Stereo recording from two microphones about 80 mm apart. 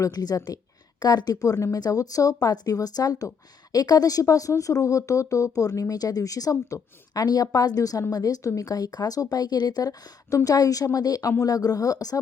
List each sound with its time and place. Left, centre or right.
0.0 s a woman's voice: left